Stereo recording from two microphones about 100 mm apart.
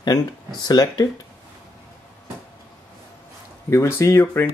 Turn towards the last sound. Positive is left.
turn(degrees=25)  # may be behind; listen again after turning